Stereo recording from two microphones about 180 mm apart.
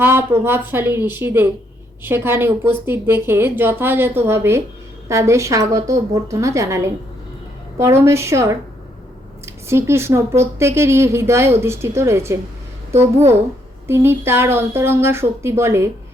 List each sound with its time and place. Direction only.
0.0 s a woman's voice: 10° right (ahead or behind)